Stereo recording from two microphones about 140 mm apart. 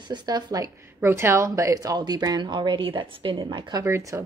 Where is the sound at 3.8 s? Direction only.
20° right (ahead or behind).